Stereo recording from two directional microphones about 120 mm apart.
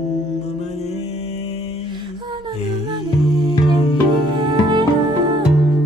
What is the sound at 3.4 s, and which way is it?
Music, 35° right (ahead or behind).